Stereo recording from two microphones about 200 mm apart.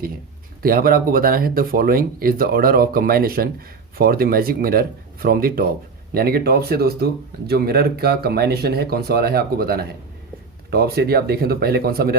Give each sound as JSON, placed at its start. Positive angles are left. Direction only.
{"t": 0.6, "sound": "speech", "side_deg": -45}